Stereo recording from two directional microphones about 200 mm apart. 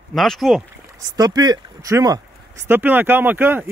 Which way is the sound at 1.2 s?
20° right (ahead or behind).